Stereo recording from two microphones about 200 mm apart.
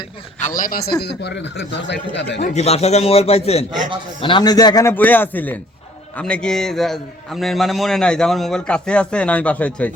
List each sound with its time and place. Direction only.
0.3 s a man's voice: 40° left (ahead or behind)
1.7 s speech: 60° left (ahead or behind)
2.4 s a man's voice: 30° left (ahead or behind); by 9.9 s 5° left (ahead or behind)